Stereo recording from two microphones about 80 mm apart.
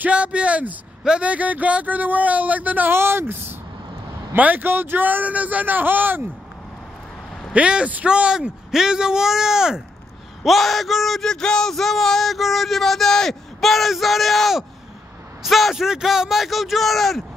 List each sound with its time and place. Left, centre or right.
0.0 s a man's voice: centre
7.5 s a man's voice: centre
10.4 s a sound: centre